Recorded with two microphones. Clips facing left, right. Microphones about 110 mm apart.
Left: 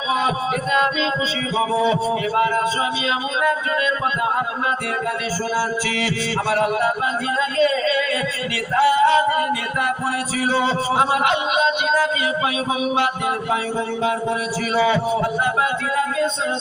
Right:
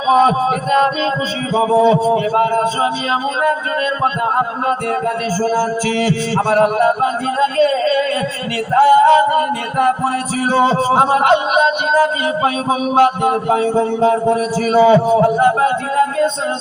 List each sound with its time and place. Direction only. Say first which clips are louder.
0.1 s music: right 9 dB; 45° right (ahead or behind)
4.0 s music: right 5 dB; 45° right (ahead or behind)